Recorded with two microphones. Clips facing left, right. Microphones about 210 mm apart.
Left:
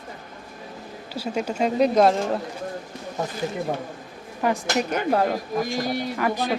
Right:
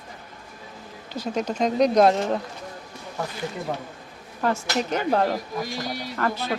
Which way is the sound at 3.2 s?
20° left (ahead or behind).